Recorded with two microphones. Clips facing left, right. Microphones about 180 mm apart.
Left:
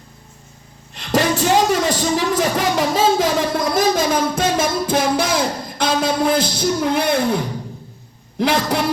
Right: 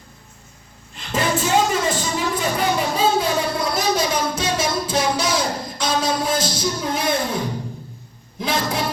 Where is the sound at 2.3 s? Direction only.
90° left.